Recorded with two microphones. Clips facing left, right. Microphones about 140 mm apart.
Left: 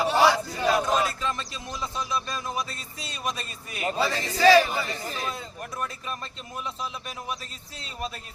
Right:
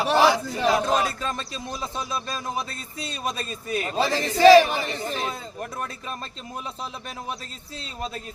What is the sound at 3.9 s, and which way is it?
A man's voice, 30° right (ahead or behind).